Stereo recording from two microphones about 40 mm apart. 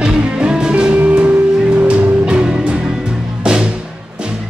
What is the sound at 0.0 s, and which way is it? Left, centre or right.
Music, right.